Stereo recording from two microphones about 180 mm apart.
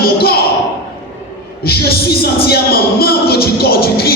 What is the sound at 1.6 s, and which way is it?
Music, 60° left (ahead or behind).